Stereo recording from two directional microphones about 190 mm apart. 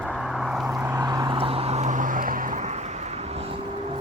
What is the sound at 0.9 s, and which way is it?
Vehicle, 20° right (ahead or behind).